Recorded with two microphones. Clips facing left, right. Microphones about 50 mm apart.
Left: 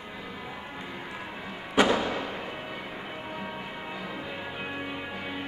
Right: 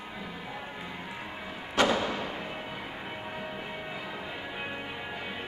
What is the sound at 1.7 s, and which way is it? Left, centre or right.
Fireworks, centre.